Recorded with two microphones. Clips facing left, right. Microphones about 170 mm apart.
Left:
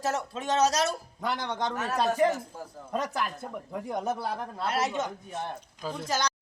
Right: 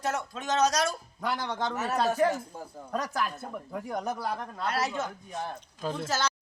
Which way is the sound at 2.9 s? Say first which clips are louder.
Left 1 dB; 25° left (ahead or behind).